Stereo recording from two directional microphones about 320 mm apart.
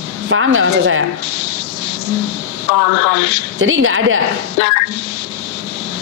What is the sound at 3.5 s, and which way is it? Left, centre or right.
Speech, right.